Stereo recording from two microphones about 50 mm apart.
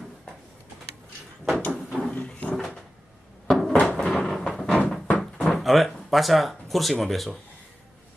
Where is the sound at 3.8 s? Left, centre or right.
Left.